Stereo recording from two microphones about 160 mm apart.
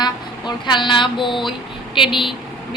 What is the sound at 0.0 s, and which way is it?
A woman's voice, 30° left (ahead or behind).